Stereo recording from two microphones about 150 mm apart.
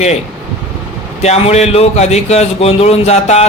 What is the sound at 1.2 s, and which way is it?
Speech, 45° left (ahead or behind).